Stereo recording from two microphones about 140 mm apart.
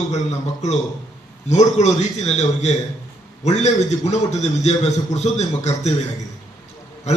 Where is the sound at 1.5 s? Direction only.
55° left (ahead or behind).